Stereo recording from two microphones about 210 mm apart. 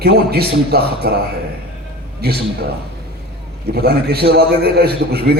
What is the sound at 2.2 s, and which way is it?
Speech, 50° right (ahead or behind).